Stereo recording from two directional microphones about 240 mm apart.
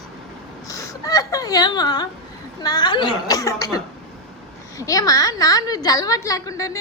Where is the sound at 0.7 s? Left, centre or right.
Centre.